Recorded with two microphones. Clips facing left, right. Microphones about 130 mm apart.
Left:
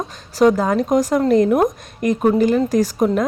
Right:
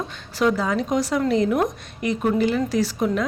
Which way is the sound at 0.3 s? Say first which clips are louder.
Left 6 dB; 45° left (ahead or behind).